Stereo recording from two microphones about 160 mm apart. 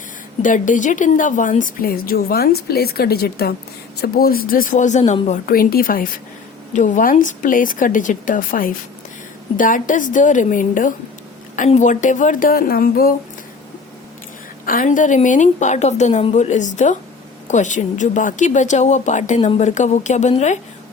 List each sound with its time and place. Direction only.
0.4 s speech: 55° left (ahead or behind); by 3.5 s 80° left
4.0 s a woman's voice: 70° left (ahead or behind); by 5.4 s 45° left (ahead or behind)
5.5 s a woman's voice: 65° left (ahead or behind)
14.6 s speech: 60° left (ahead or behind)